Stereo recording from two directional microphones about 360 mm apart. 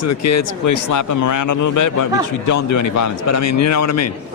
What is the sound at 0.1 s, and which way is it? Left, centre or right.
Speech, left.